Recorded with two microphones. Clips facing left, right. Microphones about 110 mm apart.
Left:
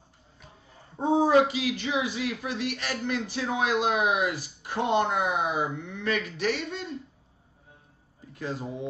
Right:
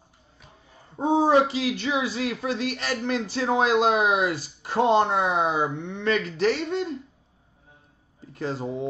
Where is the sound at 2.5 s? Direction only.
35° right (ahead or behind).